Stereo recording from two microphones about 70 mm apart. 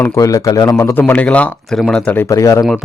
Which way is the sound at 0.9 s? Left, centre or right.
Left.